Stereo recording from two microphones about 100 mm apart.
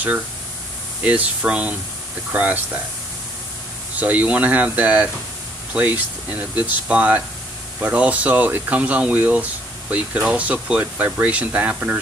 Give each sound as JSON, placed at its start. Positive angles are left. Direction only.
{"t": 1.0, "sound": "speech", "side_deg": -15}
{"t": 3.9, "sound": "speech", "side_deg": -15}